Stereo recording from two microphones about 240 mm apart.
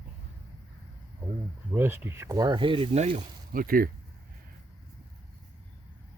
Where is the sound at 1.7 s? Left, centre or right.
Centre; by 3.9 s right.